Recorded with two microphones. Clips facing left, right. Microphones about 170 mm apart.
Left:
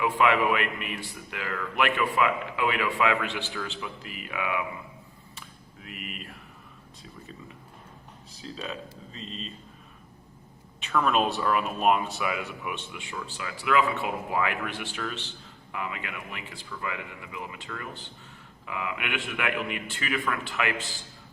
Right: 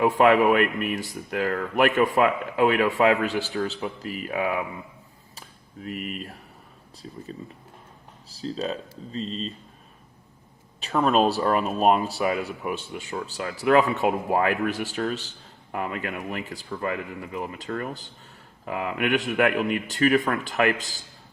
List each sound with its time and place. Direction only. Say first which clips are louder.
0.0 s speech: right 6 dB; 40° right (ahead or behind)
5.3 s a sound: right 6 dB; 40° right (ahead or behind)
8.3 s speech: right 8 dB; 35° right (ahead or behind)
10.8 s speech: right 4 dB; 35° right (ahead or behind)